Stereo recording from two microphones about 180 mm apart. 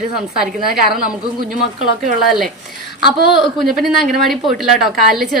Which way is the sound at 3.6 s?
Centre (ahead or behind).